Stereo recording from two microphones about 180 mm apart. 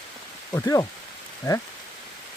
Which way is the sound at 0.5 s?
20° left (ahead or behind).